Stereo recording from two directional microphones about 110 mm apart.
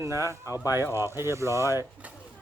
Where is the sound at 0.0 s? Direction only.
25° right (ahead or behind).